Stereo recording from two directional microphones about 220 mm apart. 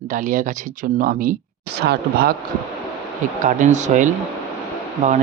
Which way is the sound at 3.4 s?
35° right (ahead or behind).